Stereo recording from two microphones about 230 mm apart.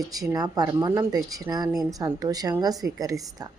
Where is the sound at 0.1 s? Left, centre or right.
Centre.